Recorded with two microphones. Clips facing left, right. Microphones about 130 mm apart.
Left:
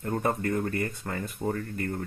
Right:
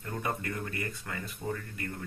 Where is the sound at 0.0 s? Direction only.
45° left (ahead or behind).